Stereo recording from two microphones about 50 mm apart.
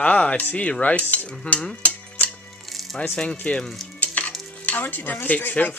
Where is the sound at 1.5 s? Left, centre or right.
Left.